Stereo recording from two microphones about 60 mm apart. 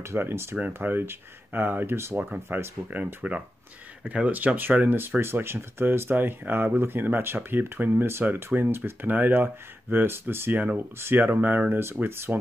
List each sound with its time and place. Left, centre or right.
0.0 s speech: right
0.6 s speech: right